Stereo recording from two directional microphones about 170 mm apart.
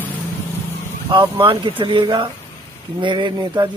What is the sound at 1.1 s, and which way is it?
Speech, 30° right (ahead or behind).